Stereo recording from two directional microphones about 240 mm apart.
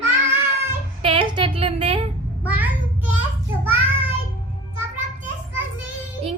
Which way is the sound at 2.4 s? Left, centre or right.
Centre.